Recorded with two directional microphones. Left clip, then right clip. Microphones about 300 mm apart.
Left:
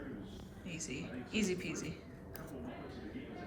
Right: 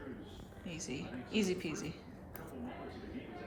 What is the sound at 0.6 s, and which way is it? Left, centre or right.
A woman's voice, centre.